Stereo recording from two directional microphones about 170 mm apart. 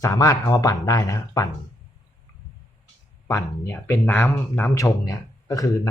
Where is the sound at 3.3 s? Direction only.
15° left (ahead or behind).